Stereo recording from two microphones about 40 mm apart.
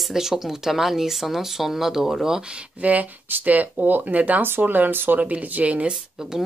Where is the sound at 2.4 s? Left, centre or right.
Right.